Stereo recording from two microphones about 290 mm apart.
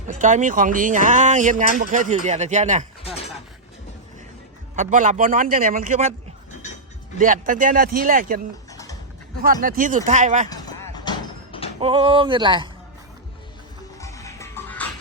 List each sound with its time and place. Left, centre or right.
0.1 s speech: right
3.0 s a sound: centre
4.8 s speech: right
6.5 s a sound: left
7.2 s speech: right
9.4 s speech: right
10.5 s a sound: centre
11.8 s speech: centre
14.0 s music: centre